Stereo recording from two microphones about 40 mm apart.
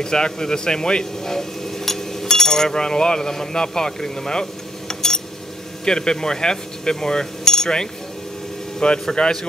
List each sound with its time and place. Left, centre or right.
0.0 s speech: centre